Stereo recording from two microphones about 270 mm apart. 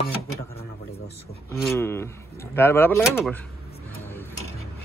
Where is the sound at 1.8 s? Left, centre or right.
Centre.